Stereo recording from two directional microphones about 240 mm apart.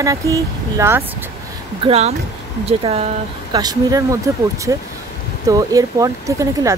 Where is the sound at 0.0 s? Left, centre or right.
Centre.